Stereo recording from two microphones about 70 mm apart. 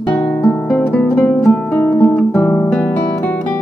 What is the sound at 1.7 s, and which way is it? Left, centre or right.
Guitar, left.